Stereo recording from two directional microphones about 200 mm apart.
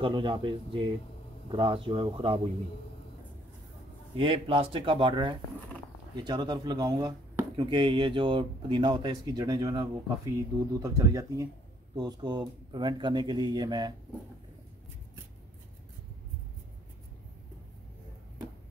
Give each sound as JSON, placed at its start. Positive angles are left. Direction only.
{"t": 0.0, "sound": "speech", "side_deg": -25}
{"t": 4.2, "sound": "speech", "side_deg": -30}